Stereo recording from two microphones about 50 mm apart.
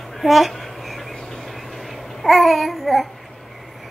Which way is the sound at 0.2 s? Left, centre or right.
Centre.